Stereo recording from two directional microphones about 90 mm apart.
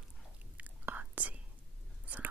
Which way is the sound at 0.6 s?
15° right (ahead or behind).